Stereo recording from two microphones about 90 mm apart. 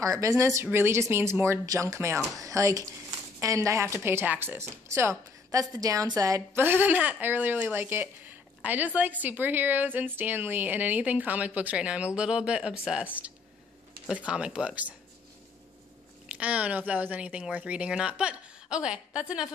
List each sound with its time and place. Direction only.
0.0 s a woman's voice: 40° right (ahead or behind)
6.5 s speech: 20° right (ahead or behind)
16.3 s speech: 15° right (ahead or behind)